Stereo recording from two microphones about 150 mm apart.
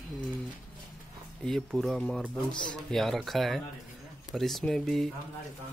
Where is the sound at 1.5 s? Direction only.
Centre (ahead or behind).